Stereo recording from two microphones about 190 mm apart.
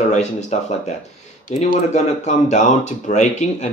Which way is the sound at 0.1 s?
35° left (ahead or behind).